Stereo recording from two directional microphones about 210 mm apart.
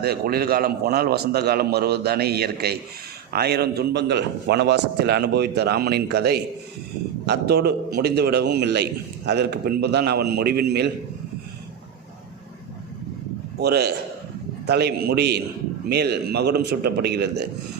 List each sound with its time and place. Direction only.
0.0 s a man's voice: 50° right (ahead or behind)
13.6 s a man's voice: 50° right (ahead or behind)